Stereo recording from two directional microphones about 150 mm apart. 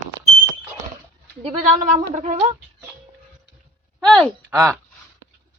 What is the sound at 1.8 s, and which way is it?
Speech, 55° right (ahead or behind).